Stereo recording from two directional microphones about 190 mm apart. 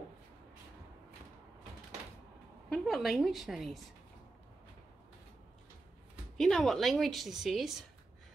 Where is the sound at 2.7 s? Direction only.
Centre (ahead or behind).